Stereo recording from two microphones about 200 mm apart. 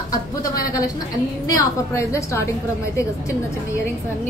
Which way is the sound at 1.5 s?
15° left (ahead or behind).